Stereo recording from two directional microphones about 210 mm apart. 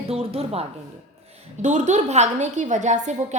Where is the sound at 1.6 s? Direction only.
35° right (ahead or behind).